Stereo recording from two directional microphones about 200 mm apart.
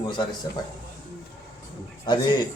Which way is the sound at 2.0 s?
25° left (ahead or behind).